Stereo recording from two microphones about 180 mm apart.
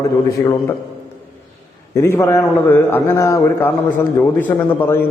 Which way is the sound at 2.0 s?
15° left (ahead or behind).